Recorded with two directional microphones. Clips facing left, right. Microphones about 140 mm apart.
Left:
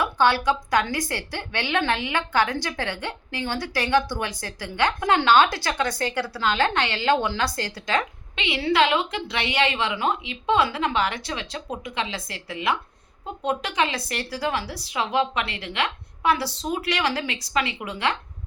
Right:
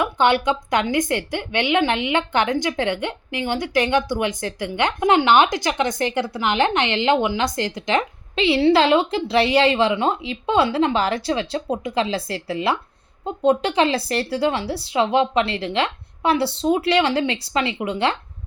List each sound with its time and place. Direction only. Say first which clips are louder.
0.0 s a woman's voice: right 3 dB; 20° right (ahead or behind)
8.4 s a woman's voice: right 6 dB; 30° right (ahead or behind)